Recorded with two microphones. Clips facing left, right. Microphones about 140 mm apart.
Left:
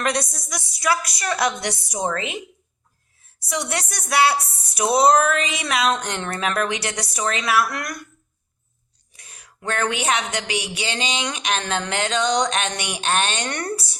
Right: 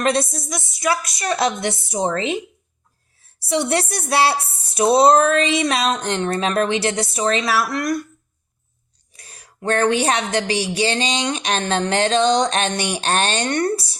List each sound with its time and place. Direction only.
0.0 s speech: 25° right (ahead or behind)
3.4 s speech: 30° right (ahead or behind)
9.1 s speech: 35° right (ahead or behind)